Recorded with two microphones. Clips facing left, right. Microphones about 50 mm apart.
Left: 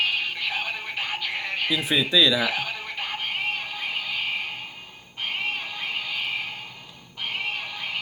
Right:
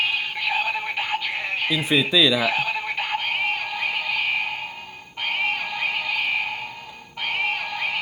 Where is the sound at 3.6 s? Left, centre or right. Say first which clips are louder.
Right 5 dB; right.